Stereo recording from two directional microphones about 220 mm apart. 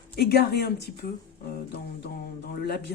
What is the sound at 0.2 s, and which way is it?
Speech, 45° left (ahead or behind).